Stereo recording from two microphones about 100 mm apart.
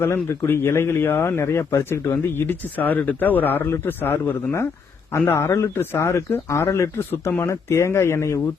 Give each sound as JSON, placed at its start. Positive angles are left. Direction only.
{"t": 0.0, "sound": "speech", "side_deg": 25}